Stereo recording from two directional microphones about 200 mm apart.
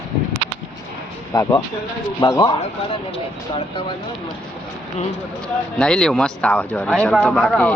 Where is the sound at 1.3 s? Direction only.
20° left (ahead or behind).